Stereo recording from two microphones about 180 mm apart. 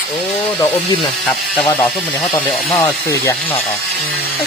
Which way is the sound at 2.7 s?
15° left (ahead or behind).